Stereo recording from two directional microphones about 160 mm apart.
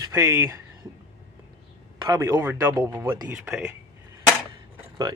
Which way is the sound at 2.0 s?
20° right (ahead or behind).